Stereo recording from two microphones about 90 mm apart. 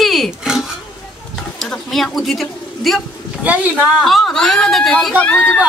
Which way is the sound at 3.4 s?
15° right (ahead or behind).